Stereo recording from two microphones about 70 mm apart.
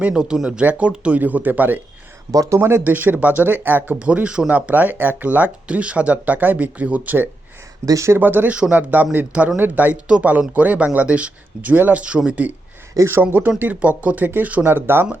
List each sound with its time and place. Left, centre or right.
0.0 s speech: centre
2.3 s speech: right
2.6 s speech: right
7.9 s speech: right
8.2 s speech: right
13.0 s speech: right
13.6 s speech: right